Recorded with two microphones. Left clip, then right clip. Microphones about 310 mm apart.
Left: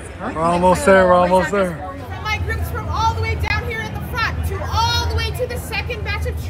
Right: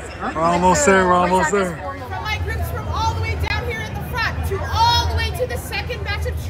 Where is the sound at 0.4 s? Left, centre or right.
Centre.